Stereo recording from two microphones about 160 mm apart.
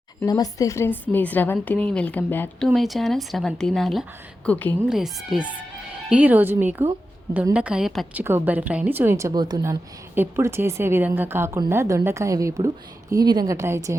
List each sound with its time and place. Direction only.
0.3 s speech: 25° left (ahead or behind)
2.6 s speech: centre (ahead or behind)
4.9 s a woman's voice: centre (ahead or behind); by 14.0 s 20° right (ahead or behind)